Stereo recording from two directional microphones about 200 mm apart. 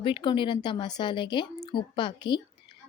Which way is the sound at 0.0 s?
25° left (ahead or behind).